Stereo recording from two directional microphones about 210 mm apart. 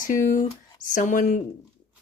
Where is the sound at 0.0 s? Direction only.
40° left (ahead or behind).